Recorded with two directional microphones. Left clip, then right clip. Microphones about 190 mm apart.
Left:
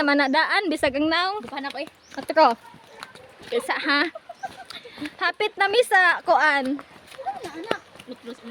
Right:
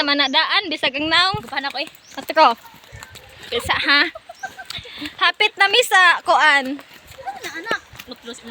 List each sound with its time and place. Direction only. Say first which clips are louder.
0.0 s a woman's voice: right 3 dB; 40° left (ahead or behind)
1.1 s speech: right 6 dB; 10° left (ahead or behind)
1.5 s speech: right 7 dB; 20° right (ahead or behind)
2.1 s speech: right 3 dB; 5° left (ahead or behind)
7.9 s sheep: right 4 dB; 25° right (ahead or behind)